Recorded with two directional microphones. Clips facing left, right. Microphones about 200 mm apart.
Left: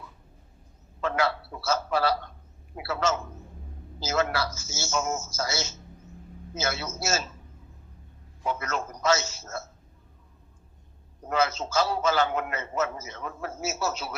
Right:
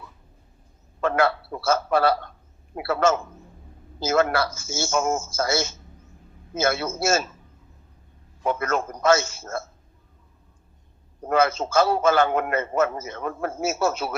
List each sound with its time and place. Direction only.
1.0 s a man's voice: 55° right (ahead or behind)
8.4 s a man's voice: 55° right (ahead or behind)
11.3 s a man's voice: 55° right (ahead or behind)